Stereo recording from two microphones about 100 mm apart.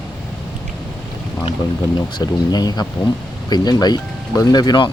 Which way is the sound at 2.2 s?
40° left (ahead or behind).